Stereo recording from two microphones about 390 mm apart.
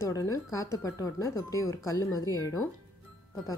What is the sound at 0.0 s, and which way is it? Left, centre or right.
Speech, centre.